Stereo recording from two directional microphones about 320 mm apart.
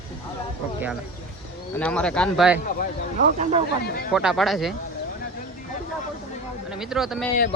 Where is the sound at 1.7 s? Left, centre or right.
Centre.